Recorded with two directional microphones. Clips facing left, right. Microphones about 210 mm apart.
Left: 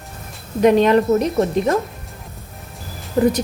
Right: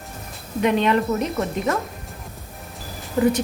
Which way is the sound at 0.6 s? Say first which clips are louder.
Left 6 dB; 40° left (ahead or behind).